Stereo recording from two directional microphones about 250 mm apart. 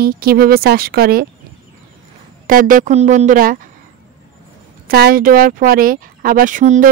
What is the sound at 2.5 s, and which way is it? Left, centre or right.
Speech, right.